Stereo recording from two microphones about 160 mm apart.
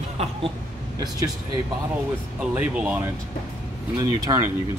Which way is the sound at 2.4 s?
10° right (ahead or behind).